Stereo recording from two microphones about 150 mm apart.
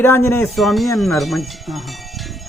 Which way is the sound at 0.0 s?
15° left (ahead or behind).